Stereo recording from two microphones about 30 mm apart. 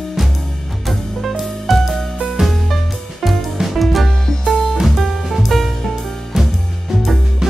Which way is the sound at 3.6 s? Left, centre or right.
Centre.